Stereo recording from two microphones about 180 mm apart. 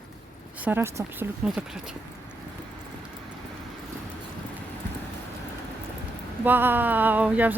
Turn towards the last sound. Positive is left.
turn(degrees=-10)  # may be behind; listen again after turning